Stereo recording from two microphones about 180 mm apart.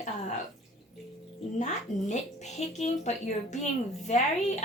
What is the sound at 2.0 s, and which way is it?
Speech, 40° left (ahead or behind).